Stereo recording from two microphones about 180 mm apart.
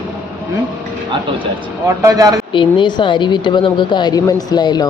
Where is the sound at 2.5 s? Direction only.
25° left (ahead or behind).